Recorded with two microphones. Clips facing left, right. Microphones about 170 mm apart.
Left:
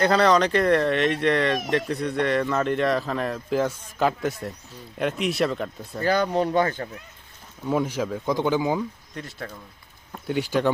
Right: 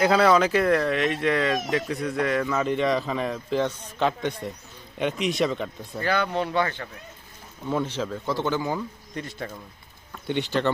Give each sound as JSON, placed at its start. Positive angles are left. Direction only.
{"t": 0.0, "sound": "speech", "side_deg": -10}
{"t": 6.0, "sound": "speech", "side_deg": 40}
{"t": 7.7, "sound": "speech", "side_deg": 10}
{"t": 9.1, "sound": "speech", "side_deg": 0}